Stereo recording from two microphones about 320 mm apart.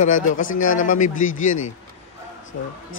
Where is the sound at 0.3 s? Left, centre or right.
Left.